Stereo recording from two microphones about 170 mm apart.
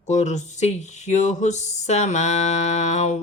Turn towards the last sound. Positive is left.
turn(degrees=40)  # may be behind; listen again after turning